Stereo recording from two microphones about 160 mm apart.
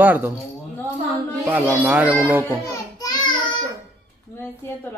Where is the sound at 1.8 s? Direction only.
10° right (ahead or behind).